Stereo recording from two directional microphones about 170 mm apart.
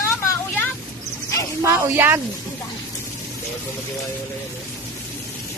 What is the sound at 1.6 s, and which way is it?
Speech, 15° right (ahead or behind).